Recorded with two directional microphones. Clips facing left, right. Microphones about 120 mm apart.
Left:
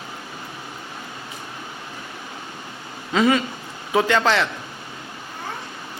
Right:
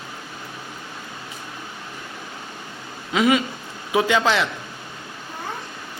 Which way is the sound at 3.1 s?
10° right (ahead or behind).